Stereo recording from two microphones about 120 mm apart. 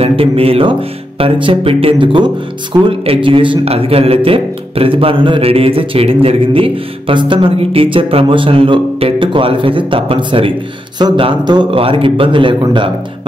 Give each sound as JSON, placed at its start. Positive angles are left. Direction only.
{"t": 0.0, "sound": "speech", "side_deg": -55}